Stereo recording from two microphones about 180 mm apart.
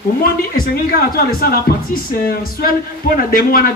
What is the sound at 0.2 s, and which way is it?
Speech, 55° left (ahead or behind).